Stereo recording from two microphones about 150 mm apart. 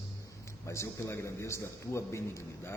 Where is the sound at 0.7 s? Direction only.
20° left (ahead or behind).